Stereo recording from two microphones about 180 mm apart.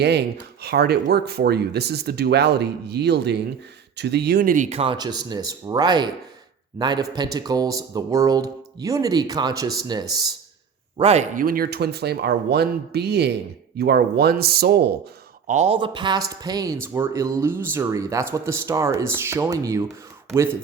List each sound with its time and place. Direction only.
0.0 s speech: 65° right (ahead or behind)
4.5 s speech: 40° right (ahead or behind); by 10.1 s 25° right (ahead or behind)
10.9 s speech: 35° right (ahead or behind)
11.4 s speech: 55° right (ahead or behind)
15.4 s speech: 40° right (ahead or behind); by 19.8 s 20° right (ahead or behind)